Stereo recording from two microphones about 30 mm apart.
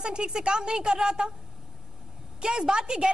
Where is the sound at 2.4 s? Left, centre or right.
Right.